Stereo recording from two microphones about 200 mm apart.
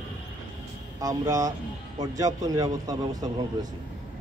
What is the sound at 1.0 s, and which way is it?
Speech, 15° right (ahead or behind).